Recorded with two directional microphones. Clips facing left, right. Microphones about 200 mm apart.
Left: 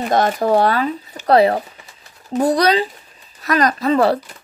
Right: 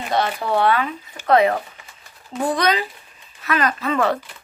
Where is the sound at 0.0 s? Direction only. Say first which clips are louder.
Left 5 dB; 45° left (ahead or behind).